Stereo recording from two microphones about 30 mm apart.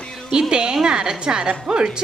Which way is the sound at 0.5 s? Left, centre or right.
Right.